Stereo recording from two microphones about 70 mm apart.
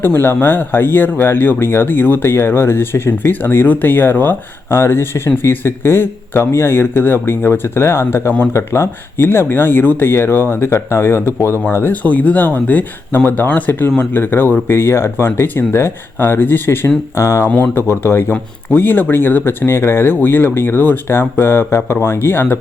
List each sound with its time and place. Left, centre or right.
0.0 s speech: left